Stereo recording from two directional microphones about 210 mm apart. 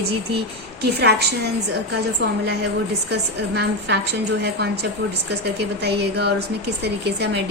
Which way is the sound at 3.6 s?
55° right (ahead or behind).